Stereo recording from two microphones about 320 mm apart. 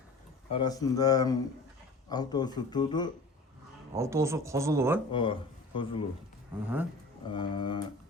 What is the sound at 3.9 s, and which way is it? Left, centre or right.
Speech, centre.